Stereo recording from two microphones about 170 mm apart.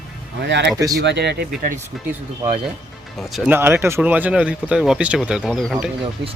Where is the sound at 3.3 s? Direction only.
5° right (ahead or behind).